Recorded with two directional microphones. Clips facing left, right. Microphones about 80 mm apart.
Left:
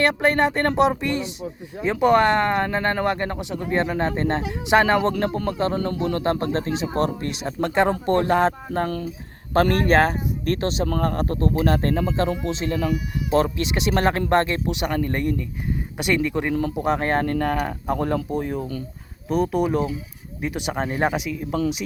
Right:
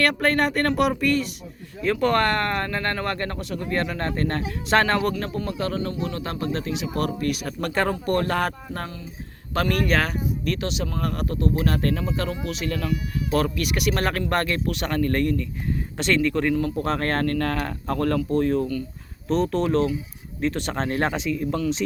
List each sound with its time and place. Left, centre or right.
0.0 s speech: centre
5.2 s a man's voice: left; by 21.6 s centre